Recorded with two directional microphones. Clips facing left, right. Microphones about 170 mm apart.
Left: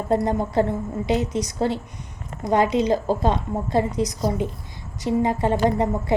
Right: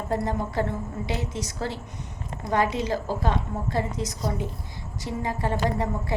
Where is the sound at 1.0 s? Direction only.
20° left (ahead or behind).